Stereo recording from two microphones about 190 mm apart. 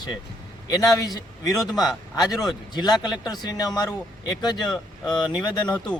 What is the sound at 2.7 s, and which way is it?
Speech, 20° left (ahead or behind).